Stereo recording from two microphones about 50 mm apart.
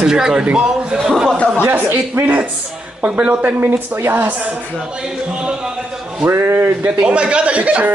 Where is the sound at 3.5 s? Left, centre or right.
Right.